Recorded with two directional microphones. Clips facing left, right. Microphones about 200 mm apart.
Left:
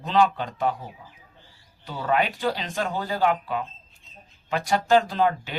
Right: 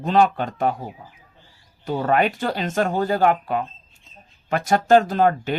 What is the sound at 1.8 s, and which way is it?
Speech, 45° right (ahead or behind).